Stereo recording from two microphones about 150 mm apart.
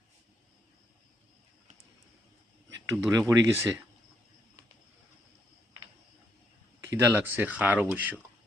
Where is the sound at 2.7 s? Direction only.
20° right (ahead or behind).